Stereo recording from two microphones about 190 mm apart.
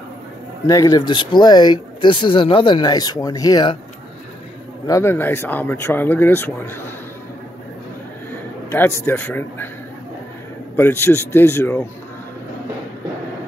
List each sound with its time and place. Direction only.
0.7 s speech: 20° left (ahead or behind)
4.8 s speech: 15° left (ahead or behind)
8.6 s speech: 15° left (ahead or behind)
10.8 s speech: 10° left (ahead or behind)